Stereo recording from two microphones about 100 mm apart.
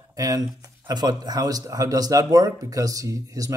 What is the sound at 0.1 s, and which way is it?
Speech, 35° right (ahead or behind).